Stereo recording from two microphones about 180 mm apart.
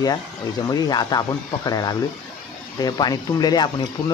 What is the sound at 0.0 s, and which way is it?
Speech, 20° left (ahead or behind).